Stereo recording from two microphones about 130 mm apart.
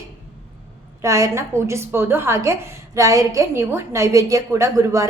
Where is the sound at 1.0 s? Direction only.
25° right (ahead or behind).